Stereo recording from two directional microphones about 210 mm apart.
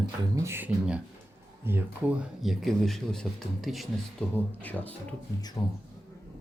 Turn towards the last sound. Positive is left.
turn(degrees=20)  # may be behind; listen again after turning